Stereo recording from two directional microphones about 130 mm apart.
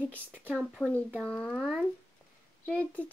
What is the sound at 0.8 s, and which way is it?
Speech, 15° left (ahead or behind).